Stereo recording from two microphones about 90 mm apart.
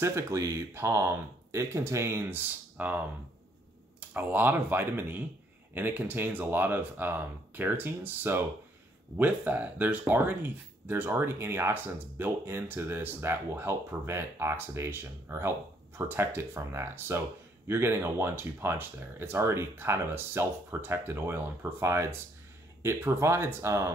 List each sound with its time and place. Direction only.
0.0 s speech: 35° right (ahead or behind)
4.1 s speech: 20° right (ahead or behind)